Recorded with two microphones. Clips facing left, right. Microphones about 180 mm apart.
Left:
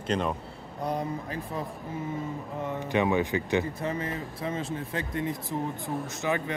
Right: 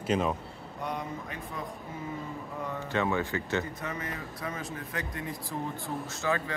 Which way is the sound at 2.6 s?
15° left (ahead or behind).